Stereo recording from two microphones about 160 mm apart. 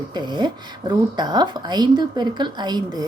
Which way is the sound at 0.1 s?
25° right (ahead or behind).